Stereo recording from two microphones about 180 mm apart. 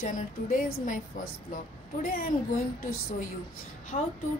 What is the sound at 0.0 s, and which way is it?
Speech, 50° left (ahead or behind).